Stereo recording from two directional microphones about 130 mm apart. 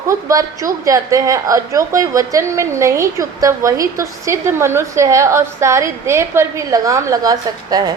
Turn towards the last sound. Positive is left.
turn(degrees=-30)  # may be behind; listen again after turning